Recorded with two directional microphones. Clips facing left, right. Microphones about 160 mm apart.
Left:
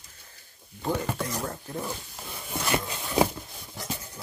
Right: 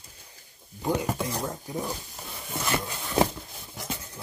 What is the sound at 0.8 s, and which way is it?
Speech, 10° right (ahead or behind).